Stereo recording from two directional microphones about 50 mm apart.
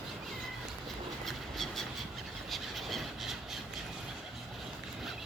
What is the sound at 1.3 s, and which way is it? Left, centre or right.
Train, centre.